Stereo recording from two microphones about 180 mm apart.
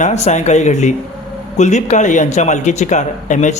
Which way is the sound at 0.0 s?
40° left (ahead or behind).